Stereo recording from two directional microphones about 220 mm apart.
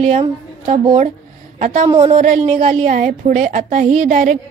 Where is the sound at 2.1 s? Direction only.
35° right (ahead or behind).